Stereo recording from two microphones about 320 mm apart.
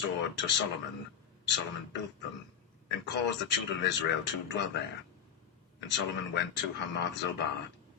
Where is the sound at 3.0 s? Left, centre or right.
Left.